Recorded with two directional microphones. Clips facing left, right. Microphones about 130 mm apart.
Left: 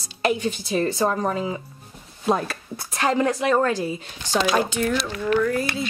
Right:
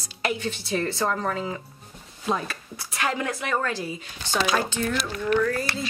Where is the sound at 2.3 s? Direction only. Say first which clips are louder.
Left 5 dB; 40° left (ahead or behind).